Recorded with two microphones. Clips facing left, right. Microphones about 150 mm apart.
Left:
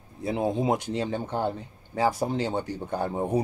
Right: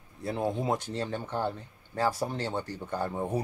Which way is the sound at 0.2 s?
15° left (ahead or behind).